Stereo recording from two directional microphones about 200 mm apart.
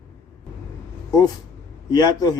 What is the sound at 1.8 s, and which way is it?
Speech, 20° left (ahead or behind).